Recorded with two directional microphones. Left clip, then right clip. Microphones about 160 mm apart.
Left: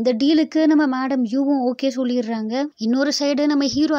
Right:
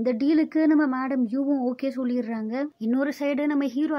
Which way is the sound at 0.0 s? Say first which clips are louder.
Left 5 dB; 45° left (ahead or behind).